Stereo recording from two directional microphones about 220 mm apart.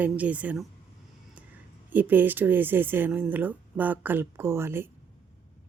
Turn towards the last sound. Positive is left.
turn(degrees=-10)  # may be behind; listen again after turning